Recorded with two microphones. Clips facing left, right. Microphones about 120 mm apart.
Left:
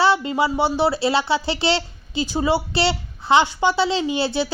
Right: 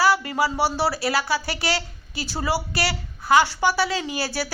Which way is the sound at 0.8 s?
25° left (ahead or behind).